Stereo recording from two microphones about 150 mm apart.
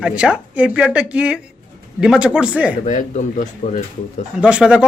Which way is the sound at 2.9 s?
60° left (ahead or behind).